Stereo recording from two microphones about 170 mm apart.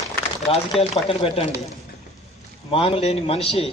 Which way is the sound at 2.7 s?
35° left (ahead or behind).